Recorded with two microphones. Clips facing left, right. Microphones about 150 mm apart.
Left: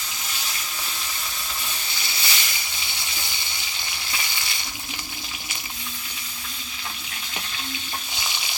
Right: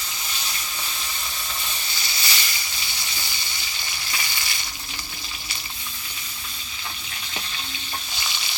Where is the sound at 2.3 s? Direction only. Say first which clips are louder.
Even; 15° left (ahead or behind).